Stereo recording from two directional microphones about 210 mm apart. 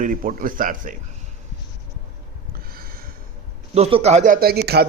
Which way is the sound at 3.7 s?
30° right (ahead or behind).